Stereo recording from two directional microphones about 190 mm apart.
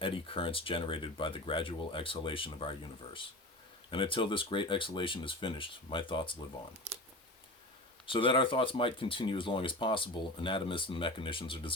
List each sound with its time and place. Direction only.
0.0 s speech: 25° left (ahead or behind)
8.0 s speech: 25° left (ahead or behind)